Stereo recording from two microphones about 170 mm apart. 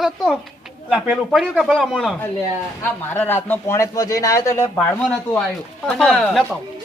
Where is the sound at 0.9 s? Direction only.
5° right (ahead or behind).